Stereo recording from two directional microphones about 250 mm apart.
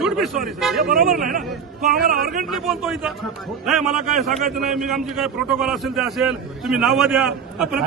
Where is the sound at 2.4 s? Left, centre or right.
Centre.